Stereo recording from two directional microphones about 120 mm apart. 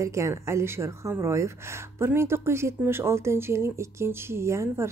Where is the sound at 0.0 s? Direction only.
25° right (ahead or behind).